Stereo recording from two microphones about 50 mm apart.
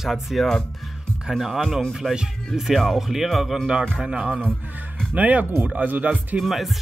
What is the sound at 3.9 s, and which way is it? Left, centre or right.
Speech, centre.